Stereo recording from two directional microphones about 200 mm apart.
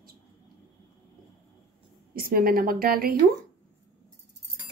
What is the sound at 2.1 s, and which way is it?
A woman's voice, 45° right (ahead or behind).